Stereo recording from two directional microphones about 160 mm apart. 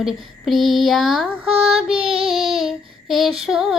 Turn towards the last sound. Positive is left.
turn(degrees=-5)  # may be behind; listen again after turning